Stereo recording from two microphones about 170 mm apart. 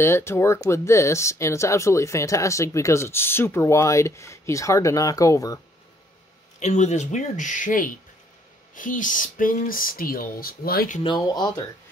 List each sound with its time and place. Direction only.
0.0 s speech: 15° left (ahead or behind)
6.6 s speech: 45° left (ahead or behind); by 11.0 s 60° left (ahead or behind)
11.1 s speech: 25° left (ahead or behind)